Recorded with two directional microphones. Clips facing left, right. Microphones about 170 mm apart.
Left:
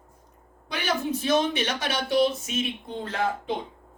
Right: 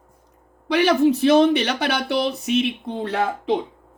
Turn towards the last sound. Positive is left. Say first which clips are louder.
# right 6 dB
turn(degrees=-75)  # may be behind; listen again after turning